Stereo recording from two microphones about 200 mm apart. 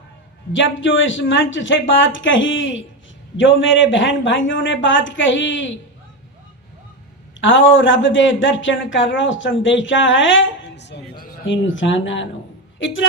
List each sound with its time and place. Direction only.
0.5 s speech: 70° left (ahead or behind)
7.4 s speech: 70° left (ahead or behind)
11.4 s speech: 70° left (ahead or behind)